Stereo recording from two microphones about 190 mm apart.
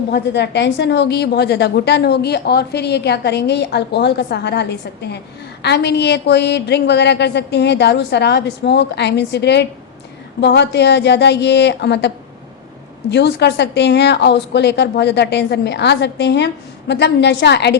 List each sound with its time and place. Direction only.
0.1 s a woman's voice: 65° left (ahead or behind)